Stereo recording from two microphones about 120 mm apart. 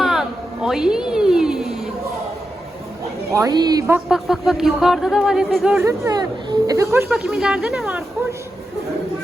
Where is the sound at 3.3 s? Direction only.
35° right (ahead or behind).